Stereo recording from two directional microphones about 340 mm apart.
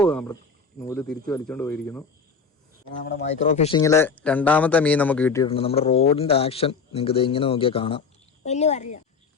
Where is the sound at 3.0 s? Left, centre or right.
Left.